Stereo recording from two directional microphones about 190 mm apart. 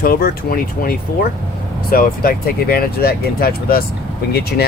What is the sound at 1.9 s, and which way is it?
Speech, 50° left (ahead or behind).